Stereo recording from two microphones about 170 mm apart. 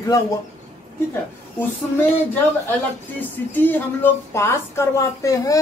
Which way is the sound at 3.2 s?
10° left (ahead or behind).